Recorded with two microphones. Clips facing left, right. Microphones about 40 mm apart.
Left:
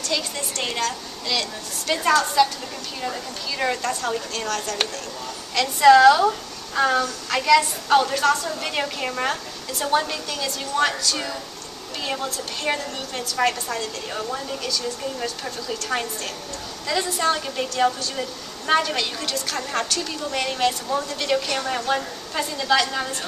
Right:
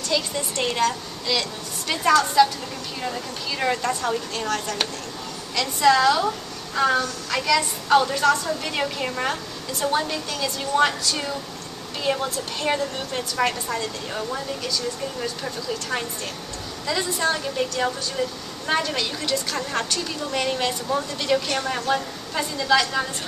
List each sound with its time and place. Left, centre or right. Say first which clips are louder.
0.1 s a woman's voice: right 3 dB; centre
5.5 s a child's voice: left 5 dB; centre